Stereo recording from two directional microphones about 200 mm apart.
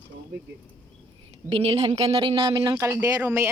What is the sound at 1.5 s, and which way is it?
Speech, 30° right (ahead or behind).